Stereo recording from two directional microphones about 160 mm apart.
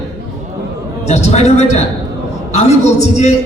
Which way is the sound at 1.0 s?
45° left (ahead or behind).